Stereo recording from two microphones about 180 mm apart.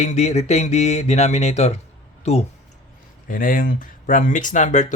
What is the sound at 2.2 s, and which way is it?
Speech, 35° left (ahead or behind).